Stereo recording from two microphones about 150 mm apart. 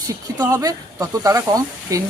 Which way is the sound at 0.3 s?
25° right (ahead or behind).